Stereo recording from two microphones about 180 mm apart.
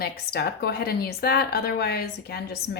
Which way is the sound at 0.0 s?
60° left (ahead or behind).